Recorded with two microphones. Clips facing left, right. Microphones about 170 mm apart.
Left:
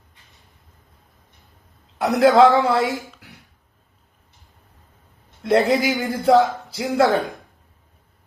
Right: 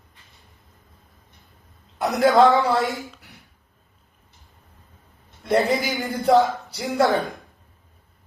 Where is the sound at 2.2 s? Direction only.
20° left (ahead or behind).